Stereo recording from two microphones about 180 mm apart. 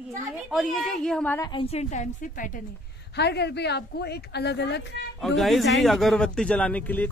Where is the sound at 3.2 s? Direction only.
70° left (ahead or behind).